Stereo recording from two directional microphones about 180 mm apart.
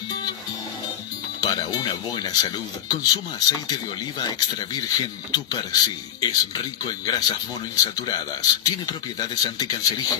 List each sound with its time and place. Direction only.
1.4 s speech: 20° left (ahead or behind)